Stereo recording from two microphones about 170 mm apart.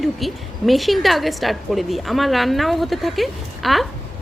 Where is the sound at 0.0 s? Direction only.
Centre (ahead or behind).